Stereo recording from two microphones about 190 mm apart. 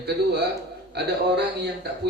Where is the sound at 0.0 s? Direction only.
60° right (ahead or behind).